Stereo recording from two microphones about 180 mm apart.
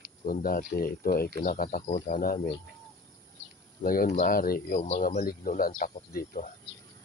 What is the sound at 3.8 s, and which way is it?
Speech, 55° left (ahead or behind).